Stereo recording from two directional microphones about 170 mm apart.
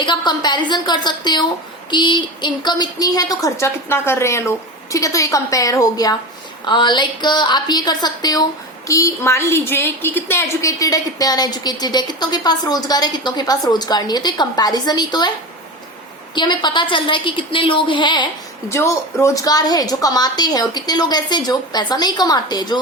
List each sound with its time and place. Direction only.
0.0 s a woman's voice: 25° left (ahead or behind)
16.3 s a woman's voice: 25° left (ahead or behind)